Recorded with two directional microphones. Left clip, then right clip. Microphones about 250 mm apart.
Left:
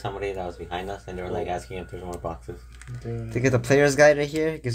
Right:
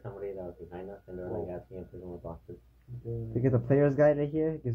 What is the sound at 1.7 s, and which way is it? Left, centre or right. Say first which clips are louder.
Speech: left 9 dB; left.